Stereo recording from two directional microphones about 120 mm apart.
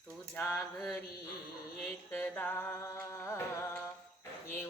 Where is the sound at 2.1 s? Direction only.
15° left (ahead or behind).